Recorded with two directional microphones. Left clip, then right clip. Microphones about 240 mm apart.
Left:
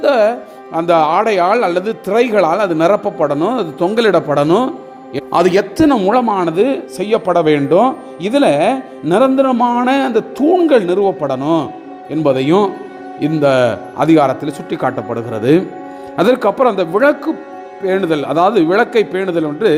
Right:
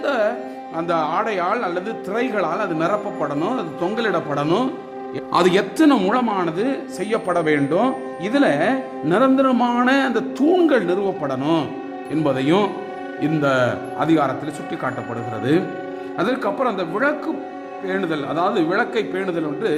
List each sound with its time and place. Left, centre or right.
0.0 s speech: left
5.3 s speech: centre